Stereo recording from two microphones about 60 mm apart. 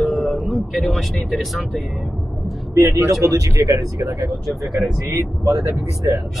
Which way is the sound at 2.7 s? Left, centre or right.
Right.